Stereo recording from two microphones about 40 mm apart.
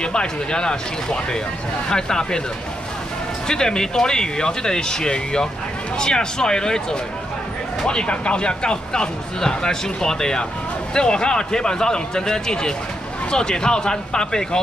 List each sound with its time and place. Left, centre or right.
0.0 s speech: left
3.4 s speech: centre